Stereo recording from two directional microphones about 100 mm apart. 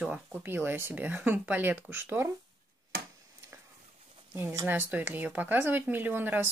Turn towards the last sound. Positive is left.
turn(degrees=-20)  # may be behind; listen again after turning